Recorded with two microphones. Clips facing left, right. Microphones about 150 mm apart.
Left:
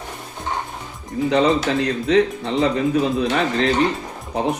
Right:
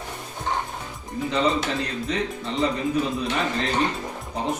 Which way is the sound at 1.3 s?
65° left (ahead or behind).